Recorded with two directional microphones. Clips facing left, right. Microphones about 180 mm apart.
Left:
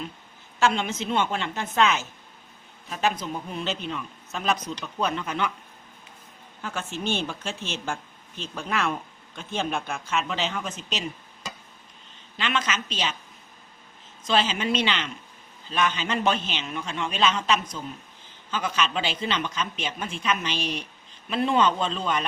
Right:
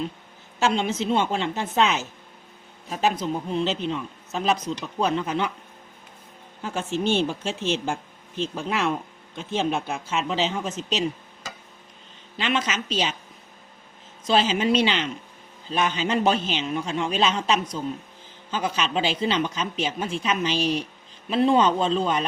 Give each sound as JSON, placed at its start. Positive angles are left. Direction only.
{"t": 0.8, "sound": "a man's voice", "side_deg": -35}
{"t": 6.6, "sound": "a man's voice", "side_deg": -30}
{"t": 8.5, "sound": "speech", "side_deg": -20}
{"t": 10.7, "sound": "a man's voice", "side_deg": -40}
{"t": 12.4, "sound": "a man's voice", "side_deg": -45}
{"t": 14.3, "sound": "a man's voice", "side_deg": -40}